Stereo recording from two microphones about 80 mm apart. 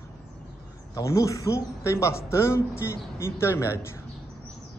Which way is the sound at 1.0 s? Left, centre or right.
Left.